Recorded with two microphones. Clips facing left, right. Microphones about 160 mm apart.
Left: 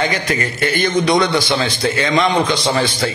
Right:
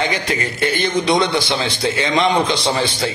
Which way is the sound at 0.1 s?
20° right (ahead or behind).